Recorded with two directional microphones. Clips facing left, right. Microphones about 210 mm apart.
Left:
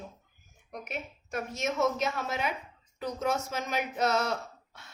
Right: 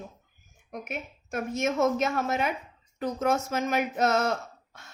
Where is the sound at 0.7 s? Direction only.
50° right (ahead or behind).